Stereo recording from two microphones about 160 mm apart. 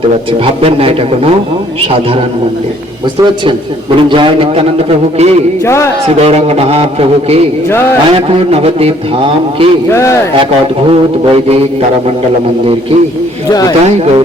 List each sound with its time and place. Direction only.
0.6 s a man's voice: 35° right (ahead or behind)
4.1 s a man's voice: 35° right (ahead or behind)
5.6 s speech: 15° left (ahead or behind)
6.1 s a man's voice: 40° right (ahead or behind)
9.9 s speech: 15° left (ahead or behind)
10.8 s a man's voice: 40° right (ahead or behind)
13.5 s speech: 25° left (ahead or behind)